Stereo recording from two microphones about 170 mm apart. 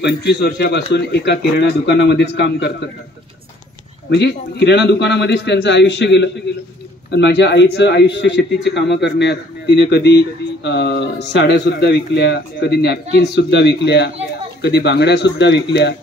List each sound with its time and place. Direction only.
0.0 s a man's voice: 80° left
4.1 s a man's voice: 80° left